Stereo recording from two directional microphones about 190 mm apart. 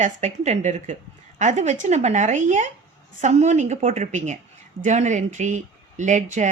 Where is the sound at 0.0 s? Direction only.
40° right (ahead or behind).